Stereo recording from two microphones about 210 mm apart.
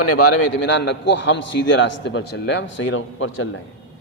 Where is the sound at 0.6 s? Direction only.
55° left (ahead or behind).